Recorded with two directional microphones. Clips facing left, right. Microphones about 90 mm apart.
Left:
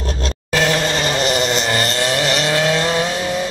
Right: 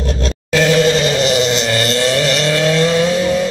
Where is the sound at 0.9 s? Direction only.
45° left (ahead or behind).